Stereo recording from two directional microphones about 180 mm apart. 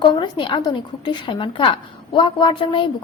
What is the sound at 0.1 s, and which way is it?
A woman's voice, 25° left (ahead or behind).